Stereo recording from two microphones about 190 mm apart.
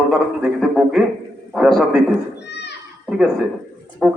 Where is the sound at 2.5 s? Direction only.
65° left (ahead or behind).